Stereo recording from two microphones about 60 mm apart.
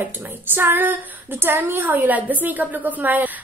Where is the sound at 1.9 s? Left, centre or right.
Right.